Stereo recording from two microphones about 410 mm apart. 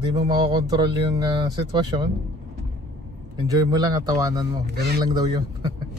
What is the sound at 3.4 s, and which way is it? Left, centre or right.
Speech, centre.